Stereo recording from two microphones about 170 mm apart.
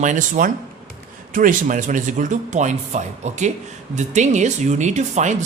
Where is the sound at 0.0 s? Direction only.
50° right (ahead or behind).